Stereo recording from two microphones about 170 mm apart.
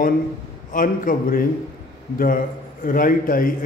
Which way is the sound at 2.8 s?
55° left (ahead or behind).